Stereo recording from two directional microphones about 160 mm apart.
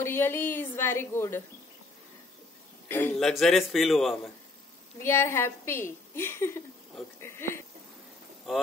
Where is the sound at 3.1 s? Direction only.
Centre (ahead or behind).